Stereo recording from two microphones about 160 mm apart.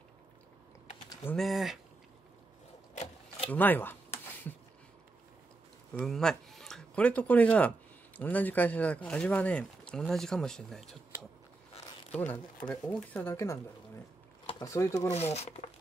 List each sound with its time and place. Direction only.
0.9 s typing: 25° left (ahead or behind)
1.2 s speech: centre (ahead or behind)
2.9 s a sound: 45° left (ahead or behind)
3.4 s speech: 10° left (ahead or behind)
5.9 s speech: centre (ahead or behind)
11.7 s a sound: 40° left (ahead or behind)
12.6 s speech: 10° left (ahead or behind)
14.6 s speech: 20° left (ahead or behind)
15.0 s speech: 40° left (ahead or behind)